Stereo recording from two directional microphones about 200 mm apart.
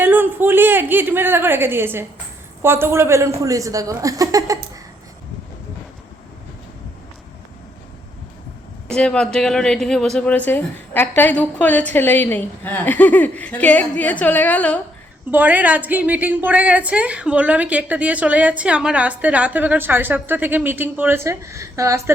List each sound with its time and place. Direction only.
0.0 s a woman's voice: 10° right (ahead or behind)
8.9 s speech: 5° left (ahead or behind)
15.3 s a woman's voice: 10° right (ahead or behind)